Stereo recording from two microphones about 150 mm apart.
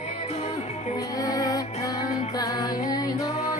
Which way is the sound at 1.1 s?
25° left (ahead or behind).